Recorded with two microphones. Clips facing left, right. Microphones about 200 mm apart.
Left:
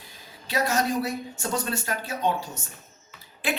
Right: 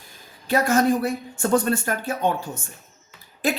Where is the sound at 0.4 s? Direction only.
50° right (ahead or behind).